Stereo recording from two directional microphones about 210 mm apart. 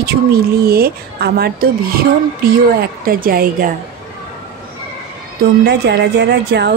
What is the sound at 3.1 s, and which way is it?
Speech, 45° right (ahead or behind).